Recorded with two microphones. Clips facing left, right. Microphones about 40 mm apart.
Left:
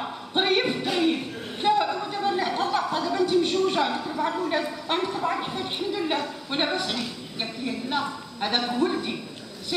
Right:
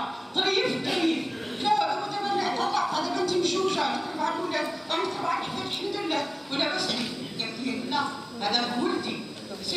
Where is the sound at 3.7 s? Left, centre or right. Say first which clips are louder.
Left 2 dB; left.